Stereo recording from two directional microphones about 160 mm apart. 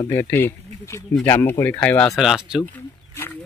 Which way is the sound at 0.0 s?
15° left (ahead or behind).